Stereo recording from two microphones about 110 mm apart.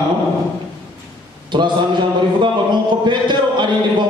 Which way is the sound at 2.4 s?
45° right (ahead or behind).